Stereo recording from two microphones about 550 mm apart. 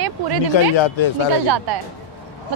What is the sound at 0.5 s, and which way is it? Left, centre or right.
Speech, left.